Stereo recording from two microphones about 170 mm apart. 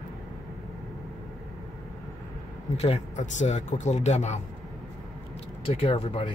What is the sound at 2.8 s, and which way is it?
Speech, 40° left (ahead or behind).